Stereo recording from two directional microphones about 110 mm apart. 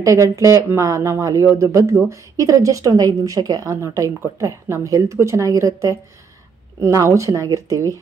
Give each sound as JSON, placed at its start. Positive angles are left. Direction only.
{"t": 0.0, "sound": "speech", "side_deg": -30}